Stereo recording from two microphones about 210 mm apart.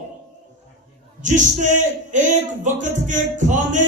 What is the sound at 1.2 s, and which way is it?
Speech, 35° right (ahead or behind).